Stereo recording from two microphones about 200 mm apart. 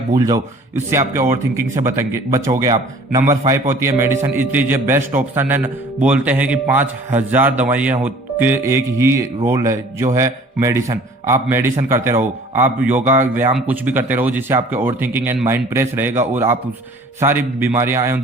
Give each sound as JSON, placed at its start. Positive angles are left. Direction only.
{"t": 0.1, "sound": "speech", "side_deg": -15}